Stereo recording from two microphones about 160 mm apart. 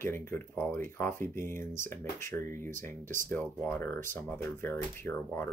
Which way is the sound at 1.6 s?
55° right (ahead or behind).